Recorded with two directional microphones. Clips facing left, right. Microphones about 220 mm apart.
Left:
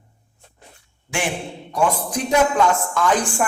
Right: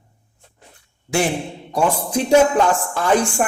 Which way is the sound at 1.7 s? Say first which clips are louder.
Right 2 dB; 30° right (ahead or behind).